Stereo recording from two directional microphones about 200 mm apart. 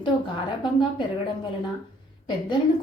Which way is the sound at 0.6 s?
25° left (ahead or behind).